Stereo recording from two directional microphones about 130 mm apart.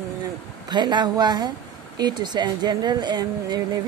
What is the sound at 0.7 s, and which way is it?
Speech, 35° right (ahead or behind).